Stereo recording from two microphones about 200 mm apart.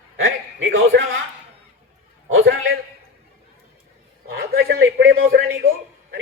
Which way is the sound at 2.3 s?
80° right.